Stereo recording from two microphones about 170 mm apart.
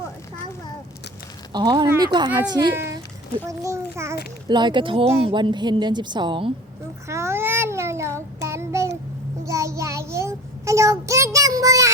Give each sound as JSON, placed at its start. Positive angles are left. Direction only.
{"t": 1.5, "sound": "a woman's voice", "side_deg": -25}
{"t": 4.4, "sound": "a woman's voice", "side_deg": -25}
{"t": 7.1, "sound": "child singing", "side_deg": -15}